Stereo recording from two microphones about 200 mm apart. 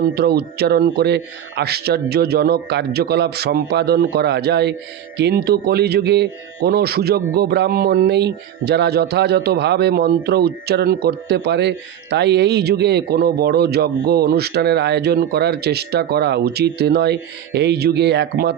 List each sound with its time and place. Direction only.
0.1 s speech: 50° right (ahead or behind)